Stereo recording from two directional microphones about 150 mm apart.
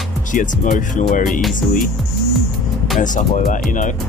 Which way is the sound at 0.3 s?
60° left (ahead or behind).